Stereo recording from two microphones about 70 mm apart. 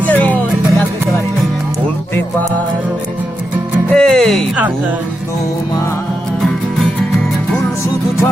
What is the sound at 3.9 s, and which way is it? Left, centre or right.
Speech, centre.